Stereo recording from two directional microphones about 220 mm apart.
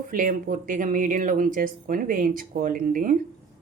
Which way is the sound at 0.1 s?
40° right (ahead or behind).